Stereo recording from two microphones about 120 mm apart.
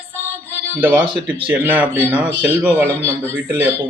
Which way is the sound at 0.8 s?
15° right (ahead or behind).